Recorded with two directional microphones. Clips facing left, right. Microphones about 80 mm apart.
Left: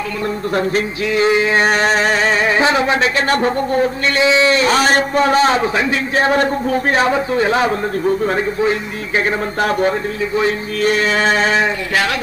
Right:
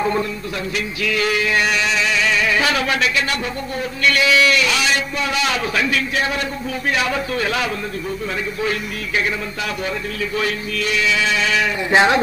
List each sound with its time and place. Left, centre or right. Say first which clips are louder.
1.0 s a man's voice: left 5 dB; left
3.3 s a man's voice: left 9 dB; left
9.6 s a man's voice: left 9 dB; left
11.9 s a man's voice: right 4 dB; right